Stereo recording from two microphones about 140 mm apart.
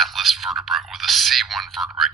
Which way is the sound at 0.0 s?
Centre (ahead or behind).